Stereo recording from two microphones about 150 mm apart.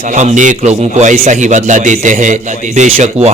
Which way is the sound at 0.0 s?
50° right (ahead or behind).